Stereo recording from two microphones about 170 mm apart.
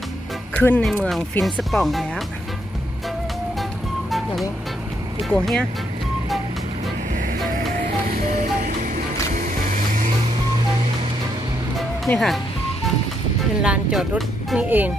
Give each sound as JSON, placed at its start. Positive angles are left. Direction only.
{"t": 0.5, "sound": "speech", "side_deg": 10}
{"t": 5.3, "sound": "speech", "side_deg": 5}
{"t": 7.7, "sound": "music", "side_deg": -60}
{"t": 9.3, "sound": "vehicle", "side_deg": -55}
{"t": 11.8, "sound": "music", "side_deg": 5}
{"t": 13.6, "sound": "speech", "side_deg": -5}